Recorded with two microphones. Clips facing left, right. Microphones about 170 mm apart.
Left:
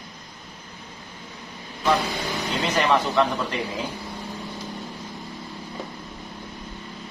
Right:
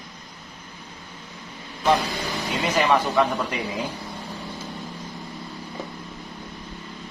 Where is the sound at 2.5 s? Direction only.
10° right (ahead or behind).